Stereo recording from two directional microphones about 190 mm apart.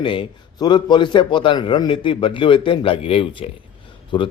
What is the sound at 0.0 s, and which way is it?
Speech, 25° left (ahead or behind).